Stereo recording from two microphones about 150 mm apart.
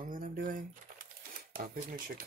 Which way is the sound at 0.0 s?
65° right (ahead or behind).